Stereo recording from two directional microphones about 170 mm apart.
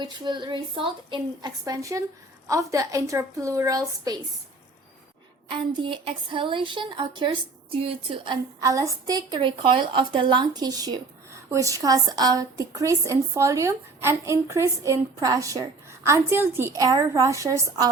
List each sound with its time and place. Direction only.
0.0 s a woman's voice: 25° right (ahead or behind)
5.5 s a woman's voice: 30° right (ahead or behind)